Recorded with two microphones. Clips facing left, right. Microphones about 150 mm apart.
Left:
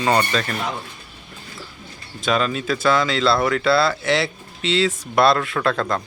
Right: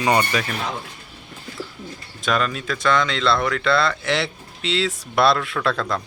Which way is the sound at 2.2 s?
Centre (ahead or behind).